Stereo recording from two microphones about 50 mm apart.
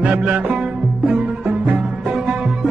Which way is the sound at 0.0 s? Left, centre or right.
Right.